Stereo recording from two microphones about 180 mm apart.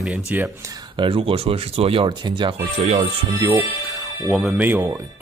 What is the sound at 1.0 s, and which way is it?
Speech, 30° right (ahead or behind).